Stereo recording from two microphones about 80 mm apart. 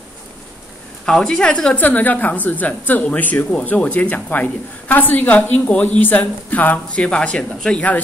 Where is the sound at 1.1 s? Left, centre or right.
Centre.